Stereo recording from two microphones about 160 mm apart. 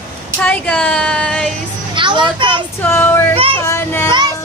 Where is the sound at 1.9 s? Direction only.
30° right (ahead or behind).